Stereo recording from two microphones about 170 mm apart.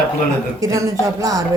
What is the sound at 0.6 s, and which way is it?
Speech, 20° right (ahead or behind).